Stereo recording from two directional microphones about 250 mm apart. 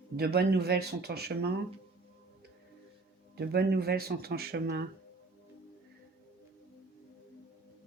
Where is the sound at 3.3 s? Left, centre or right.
Right.